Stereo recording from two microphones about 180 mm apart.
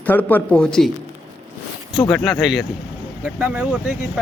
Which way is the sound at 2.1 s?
Centre (ahead or behind).